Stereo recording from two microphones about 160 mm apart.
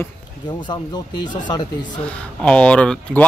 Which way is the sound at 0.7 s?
25° left (ahead or behind).